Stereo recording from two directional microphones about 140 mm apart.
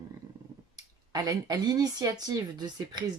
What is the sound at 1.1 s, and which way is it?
Speech, 30° right (ahead or behind).